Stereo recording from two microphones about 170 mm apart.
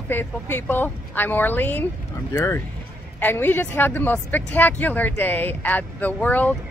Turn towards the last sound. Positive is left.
turn(degrees=10)  # may be behind; listen again after turning